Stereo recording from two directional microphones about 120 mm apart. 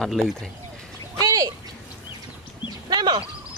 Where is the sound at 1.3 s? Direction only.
30° right (ahead or behind).